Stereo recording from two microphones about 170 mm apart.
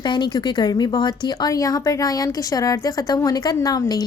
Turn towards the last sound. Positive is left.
turn(degrees=20)  # may be behind; listen again after turning